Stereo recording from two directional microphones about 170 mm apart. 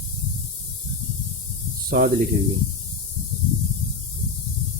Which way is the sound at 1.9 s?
60° right (ahead or behind).